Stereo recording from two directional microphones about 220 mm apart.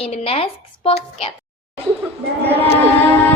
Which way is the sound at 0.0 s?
25° left (ahead or behind).